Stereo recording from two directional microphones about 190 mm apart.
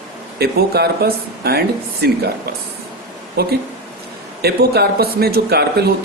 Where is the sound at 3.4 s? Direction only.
55° right (ahead or behind).